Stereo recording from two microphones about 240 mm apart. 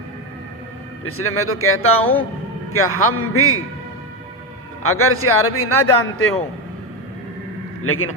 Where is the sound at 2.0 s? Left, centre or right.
Left.